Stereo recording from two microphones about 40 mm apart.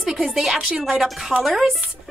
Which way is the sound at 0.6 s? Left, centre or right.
Centre.